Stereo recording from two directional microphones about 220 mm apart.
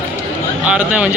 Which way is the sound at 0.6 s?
5° right (ahead or behind).